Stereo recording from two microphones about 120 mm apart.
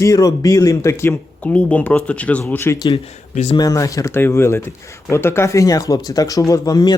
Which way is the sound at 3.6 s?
30° left (ahead or behind).